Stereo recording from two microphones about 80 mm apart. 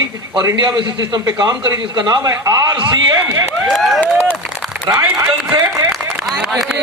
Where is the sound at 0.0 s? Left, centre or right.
Right.